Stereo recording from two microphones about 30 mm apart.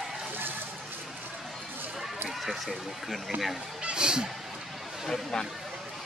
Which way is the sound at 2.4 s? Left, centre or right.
Centre.